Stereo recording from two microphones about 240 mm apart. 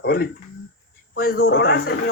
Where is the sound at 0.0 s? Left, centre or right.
Left.